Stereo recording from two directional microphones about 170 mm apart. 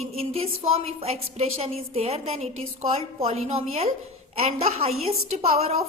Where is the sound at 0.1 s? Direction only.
35° right (ahead or behind).